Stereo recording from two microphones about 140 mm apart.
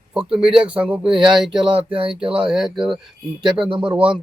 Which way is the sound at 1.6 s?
40° right (ahead or behind).